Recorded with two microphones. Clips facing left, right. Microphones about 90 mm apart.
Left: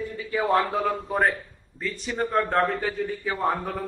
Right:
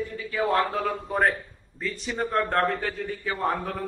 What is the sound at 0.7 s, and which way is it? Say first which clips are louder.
A man's voice: left 2 dB; 5° left (ahead or behind).